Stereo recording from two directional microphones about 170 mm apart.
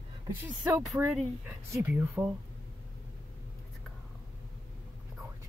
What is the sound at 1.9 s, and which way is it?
Speech, 10° right (ahead or behind).